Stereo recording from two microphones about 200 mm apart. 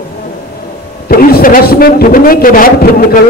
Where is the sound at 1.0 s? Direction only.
50° left (ahead or behind).